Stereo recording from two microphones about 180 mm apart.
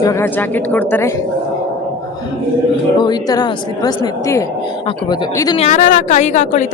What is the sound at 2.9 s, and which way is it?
A woman's voice, 25° left (ahead or behind).